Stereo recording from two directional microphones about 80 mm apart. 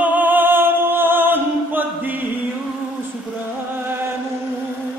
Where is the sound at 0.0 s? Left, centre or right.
Right.